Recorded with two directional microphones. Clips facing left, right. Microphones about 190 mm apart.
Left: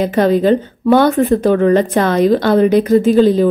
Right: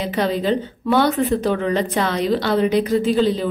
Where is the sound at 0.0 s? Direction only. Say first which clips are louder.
Left 8 dB; 50° left (ahead or behind).